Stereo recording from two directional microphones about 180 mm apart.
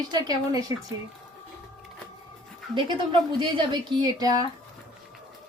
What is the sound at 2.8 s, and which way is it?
A woman's voice, 25° right (ahead or behind).